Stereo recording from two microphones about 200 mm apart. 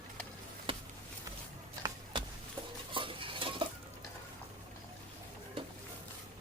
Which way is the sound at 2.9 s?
25° right (ahead or behind).